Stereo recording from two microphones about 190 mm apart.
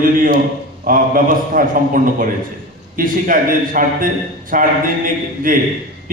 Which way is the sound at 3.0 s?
45° right (ahead or behind).